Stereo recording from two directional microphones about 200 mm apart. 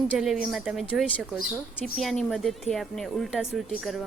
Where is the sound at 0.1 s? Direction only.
Centre (ahead or behind).